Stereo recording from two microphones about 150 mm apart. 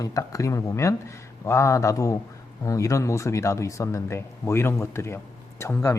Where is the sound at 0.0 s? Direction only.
20° left (ahead or behind).